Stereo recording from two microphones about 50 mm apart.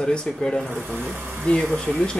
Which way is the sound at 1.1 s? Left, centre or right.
Right.